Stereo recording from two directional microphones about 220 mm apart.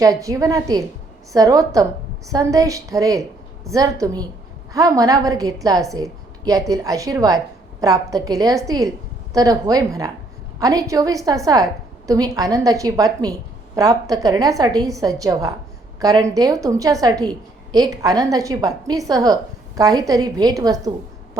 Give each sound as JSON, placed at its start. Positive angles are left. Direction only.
{"t": 0.0, "sound": "a woman's voice", "side_deg": -15}